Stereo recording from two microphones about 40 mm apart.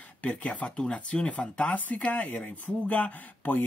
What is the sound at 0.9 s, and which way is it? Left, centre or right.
Speech, left.